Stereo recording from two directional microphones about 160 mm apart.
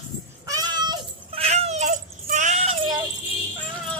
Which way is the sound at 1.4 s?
40° right (ahead or behind).